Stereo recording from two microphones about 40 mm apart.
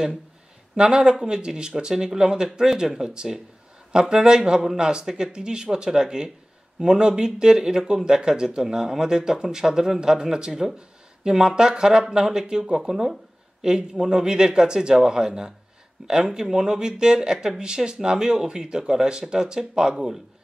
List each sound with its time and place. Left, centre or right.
0.7 s speech: right
16.0 s speech: right
16.3 s speech: centre